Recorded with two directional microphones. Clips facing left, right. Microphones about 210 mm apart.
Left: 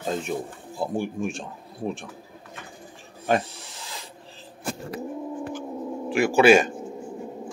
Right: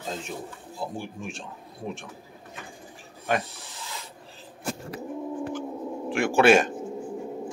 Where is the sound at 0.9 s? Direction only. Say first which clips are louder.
Left 8 dB; 50° left (ahead or behind).